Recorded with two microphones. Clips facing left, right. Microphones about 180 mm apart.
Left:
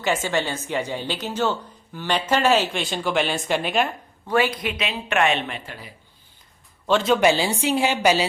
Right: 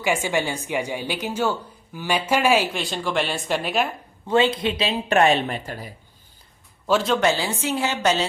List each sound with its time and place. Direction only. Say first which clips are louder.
0.0 s a woman's voice: even; 15° right (ahead or behind)
4.3 s speech: right 2 dB; 25° right (ahead or behind); by 5.9 s 40° right (ahead or behind)
6.8 s a man's voice: left 1 dB; centre (ahead or behind)
7.2 s a woman's voice: left 3 dB; 15° left (ahead or behind)